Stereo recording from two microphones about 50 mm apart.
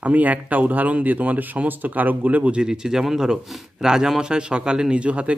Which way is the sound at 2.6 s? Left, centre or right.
Centre.